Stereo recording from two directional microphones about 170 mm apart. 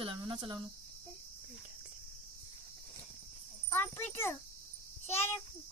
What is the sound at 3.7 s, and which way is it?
Speech, 10° left (ahead or behind).